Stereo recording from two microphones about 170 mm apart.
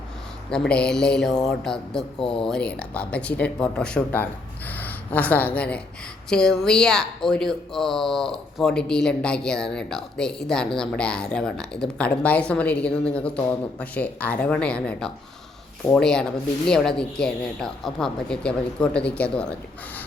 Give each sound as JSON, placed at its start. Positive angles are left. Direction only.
{"t": 0.5, "sound": "speech", "side_deg": 5}
{"t": 2.2, "sound": "speech", "side_deg": 30}
{"t": 2.5, "sound": "speech", "side_deg": 5}